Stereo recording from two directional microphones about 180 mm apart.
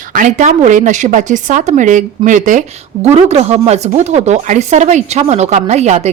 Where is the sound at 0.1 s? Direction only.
45° right (ahead or behind).